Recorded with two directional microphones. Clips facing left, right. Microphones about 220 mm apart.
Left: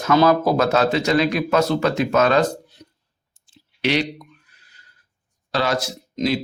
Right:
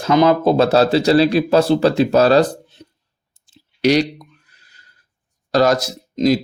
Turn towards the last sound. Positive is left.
turn(degrees=-40)  # may be behind; listen again after turning